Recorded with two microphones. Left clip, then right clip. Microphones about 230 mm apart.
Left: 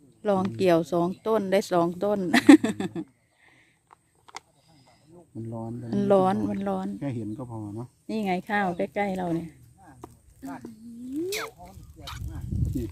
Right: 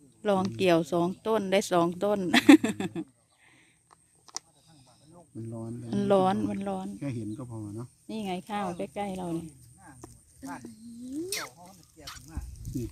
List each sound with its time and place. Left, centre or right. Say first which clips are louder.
0.2 s speech: left 2 dB; centre
5.5 s speech: left 4 dB; centre
8.0 s speech: left 7 dB; centre
11.3 s speech: left 4 dB; centre